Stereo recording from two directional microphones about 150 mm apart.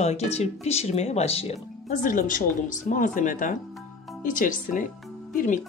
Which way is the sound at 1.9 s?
60° left (ahead or behind).